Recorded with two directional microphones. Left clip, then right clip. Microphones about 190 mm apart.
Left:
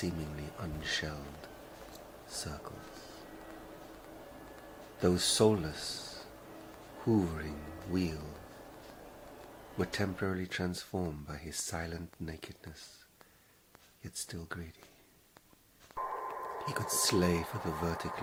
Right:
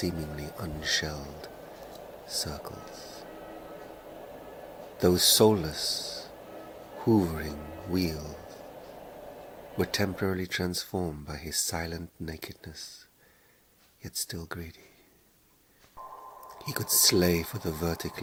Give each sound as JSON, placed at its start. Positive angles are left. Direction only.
{"t": 0.0, "sound": "speech", "side_deg": -20}
{"t": 4.9, "sound": "speech", "side_deg": -20}
{"t": 9.7, "sound": "speech", "side_deg": -20}
{"t": 14.3, "sound": "speech", "side_deg": -20}
{"t": 16.0, "sound": "a sound", "side_deg": 75}
{"t": 16.7, "sound": "speech", "side_deg": -20}